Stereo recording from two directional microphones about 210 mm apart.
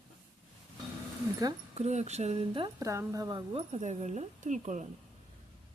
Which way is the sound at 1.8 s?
30° right (ahead or behind).